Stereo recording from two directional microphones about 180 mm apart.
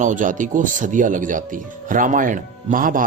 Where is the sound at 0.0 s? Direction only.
45° right (ahead or behind).